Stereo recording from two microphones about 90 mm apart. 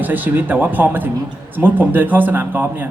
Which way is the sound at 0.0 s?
20° right (ahead or behind).